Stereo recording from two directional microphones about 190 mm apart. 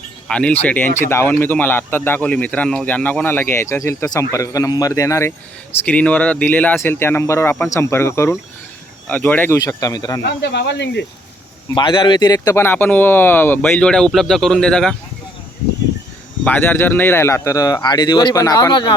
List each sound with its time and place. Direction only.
0.3 s speech: 5° left (ahead or behind)
10.2 s speech: 65° left (ahead or behind)
11.7 s speech: 25° left (ahead or behind); by 14.9 s 5° left (ahead or behind)
16.4 s speech: 10° left (ahead or behind)